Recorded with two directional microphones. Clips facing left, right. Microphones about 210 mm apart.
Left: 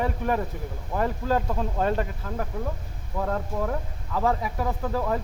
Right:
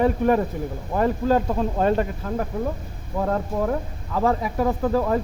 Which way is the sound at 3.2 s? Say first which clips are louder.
Right 4 dB; 35° right (ahead or behind).